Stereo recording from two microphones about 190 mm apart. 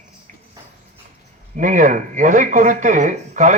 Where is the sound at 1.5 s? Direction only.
40° right (ahead or behind).